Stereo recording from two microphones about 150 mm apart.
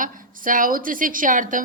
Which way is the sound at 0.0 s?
65° right (ahead or behind).